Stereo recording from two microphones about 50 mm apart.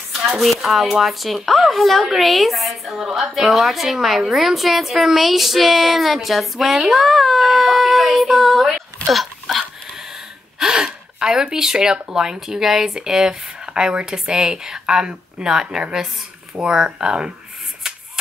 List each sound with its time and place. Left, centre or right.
0.1 s dishes: centre
0.5 s speech: centre
9.1 s a sound: centre
10.6 s gasp: centre
11.5 s speech: centre
17.8 s shuffling cards: centre